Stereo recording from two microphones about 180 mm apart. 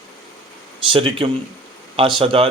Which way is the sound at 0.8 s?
30° right (ahead or behind).